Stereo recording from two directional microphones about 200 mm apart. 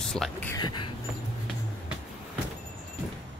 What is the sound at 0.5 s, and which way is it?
Speech, 20° left (ahead or behind).